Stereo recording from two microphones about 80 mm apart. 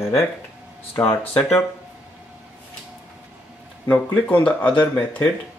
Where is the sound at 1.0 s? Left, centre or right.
Centre.